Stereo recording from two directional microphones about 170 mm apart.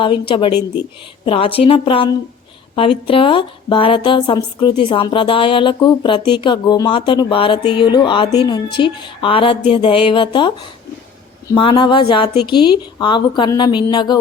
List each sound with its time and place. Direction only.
0.0 s a woman's voice: 30° left (ahead or behind)
11.5 s a woman's voice: 30° left (ahead or behind)